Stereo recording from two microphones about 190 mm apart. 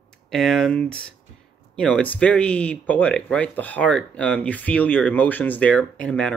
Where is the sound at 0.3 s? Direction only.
Centre (ahead or behind).